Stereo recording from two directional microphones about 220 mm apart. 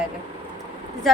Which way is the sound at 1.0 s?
Centre (ahead or behind).